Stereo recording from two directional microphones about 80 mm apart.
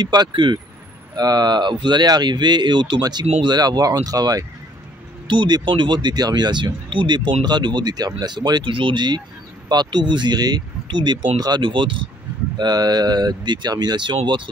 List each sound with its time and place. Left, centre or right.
0.0 s speech: right
1.1 s speech: right
5.3 s speech: right
12.5 s speech: right